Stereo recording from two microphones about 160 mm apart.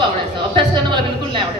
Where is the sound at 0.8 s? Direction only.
30° right (ahead or behind).